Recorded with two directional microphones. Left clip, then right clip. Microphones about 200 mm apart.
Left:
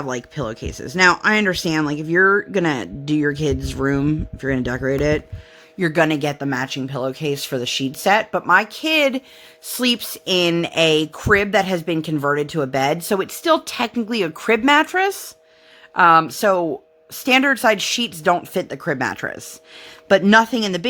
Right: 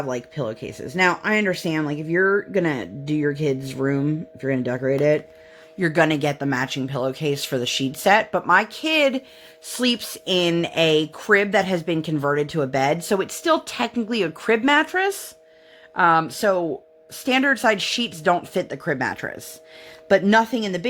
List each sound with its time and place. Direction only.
0.0 s speech: 25° left (ahead or behind)